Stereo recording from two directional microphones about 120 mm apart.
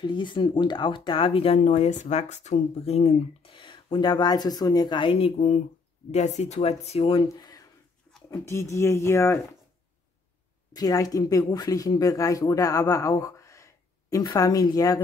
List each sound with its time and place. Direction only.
0.0 s speech: 40° left (ahead or behind)
1.6 s speech: 80° left; by 3.5 s 60° left (ahead or behind)
3.5 s speech: 40° left (ahead or behind)
5.1 s speech: 60° left (ahead or behind)
7.3 s a sound: 35° left (ahead or behind)
8.3 s speech: 25° left (ahead or behind)
10.7 s speech: 30° left (ahead or behind)